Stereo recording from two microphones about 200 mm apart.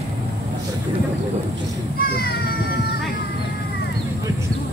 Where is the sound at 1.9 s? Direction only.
50° left (ahead or behind).